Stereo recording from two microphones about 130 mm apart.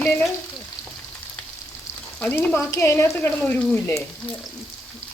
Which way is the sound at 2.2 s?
10° left (ahead or behind).